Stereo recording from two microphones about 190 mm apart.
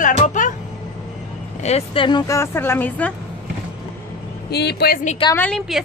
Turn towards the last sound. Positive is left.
turn(degrees=0)  # may be behind; listen again after turning